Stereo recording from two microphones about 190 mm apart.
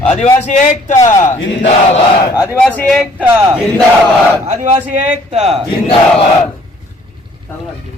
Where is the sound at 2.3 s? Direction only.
15° left (ahead or behind).